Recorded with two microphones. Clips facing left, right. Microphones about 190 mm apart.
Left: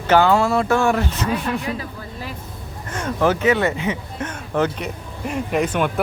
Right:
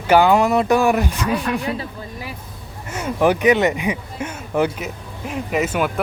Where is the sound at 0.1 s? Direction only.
15° right (ahead or behind).